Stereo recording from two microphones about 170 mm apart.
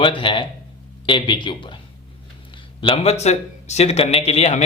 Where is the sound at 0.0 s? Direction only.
30° left (ahead or behind).